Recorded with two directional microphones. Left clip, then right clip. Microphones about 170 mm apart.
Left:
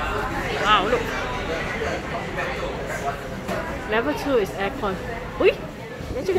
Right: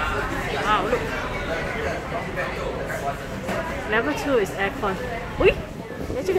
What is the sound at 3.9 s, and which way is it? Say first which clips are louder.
Speech: even; 5° left (ahead or behind).